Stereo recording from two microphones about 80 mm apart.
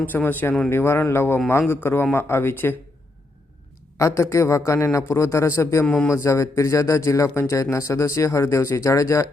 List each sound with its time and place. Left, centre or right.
0.0 s speech: left
3.9 s speech: left
5.8 s a man's voice: centre
6.1 s speech: left